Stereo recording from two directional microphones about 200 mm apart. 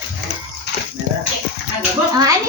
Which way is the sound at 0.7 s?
60° left (ahead or behind).